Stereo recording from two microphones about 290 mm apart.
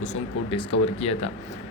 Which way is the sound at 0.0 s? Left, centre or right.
Left.